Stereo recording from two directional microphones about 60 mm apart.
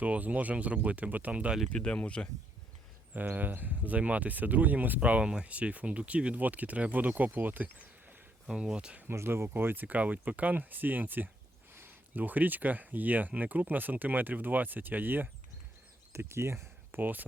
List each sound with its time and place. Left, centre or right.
0.0 s speech: right
1.7 s speech: centre
3.2 s speech: right
8.4 s speech: centre
9.0 s speech: right
9.8 s speech: right
16.1 s speech: right
17.0 s speech: right